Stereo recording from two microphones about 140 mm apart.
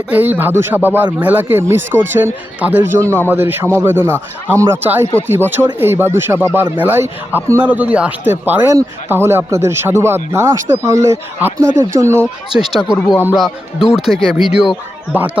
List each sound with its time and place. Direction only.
0.1 s speech: 15° right (ahead or behind)
12.5 s speech: 5° right (ahead or behind)